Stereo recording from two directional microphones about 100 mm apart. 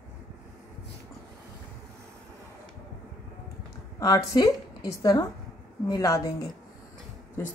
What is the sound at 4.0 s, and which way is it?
A woman's voice, 35° left (ahead or behind).